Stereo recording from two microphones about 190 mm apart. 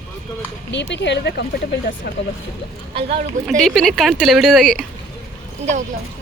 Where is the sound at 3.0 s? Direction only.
35° right (ahead or behind).